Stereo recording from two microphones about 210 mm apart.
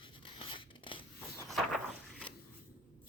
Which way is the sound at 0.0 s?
25° left (ahead or behind).